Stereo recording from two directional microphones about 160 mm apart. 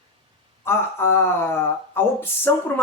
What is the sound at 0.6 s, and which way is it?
Speech, 15° left (ahead or behind).